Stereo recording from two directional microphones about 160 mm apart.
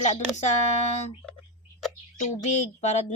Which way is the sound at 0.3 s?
45° left (ahead or behind).